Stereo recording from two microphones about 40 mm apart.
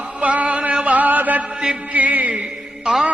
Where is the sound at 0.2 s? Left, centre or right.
Right.